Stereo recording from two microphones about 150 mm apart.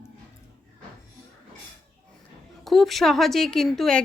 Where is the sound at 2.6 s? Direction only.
Centre (ahead or behind).